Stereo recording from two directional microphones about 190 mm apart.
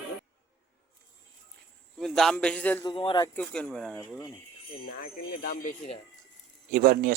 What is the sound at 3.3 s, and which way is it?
Speech, 5° left (ahead or behind).